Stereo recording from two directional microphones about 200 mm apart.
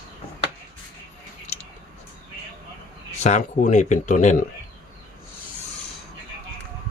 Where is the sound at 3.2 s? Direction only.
35° left (ahead or behind).